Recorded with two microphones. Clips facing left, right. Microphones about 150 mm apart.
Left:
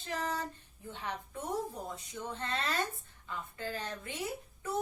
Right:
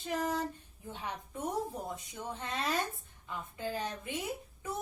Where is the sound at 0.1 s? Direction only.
10° right (ahead or behind).